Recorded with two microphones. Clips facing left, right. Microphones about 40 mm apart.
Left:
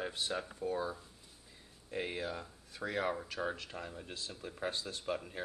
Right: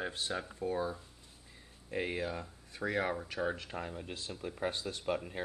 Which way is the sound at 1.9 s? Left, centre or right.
Centre.